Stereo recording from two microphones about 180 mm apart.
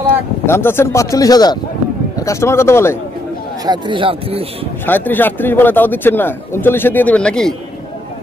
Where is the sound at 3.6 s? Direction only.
25° right (ahead or behind).